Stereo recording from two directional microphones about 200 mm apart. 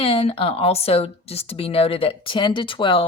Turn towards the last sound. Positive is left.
turn(degrees=25)  # may be behind; listen again after turning